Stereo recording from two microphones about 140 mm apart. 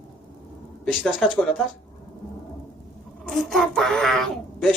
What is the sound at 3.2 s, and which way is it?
A child's voice, 5° left (ahead or behind).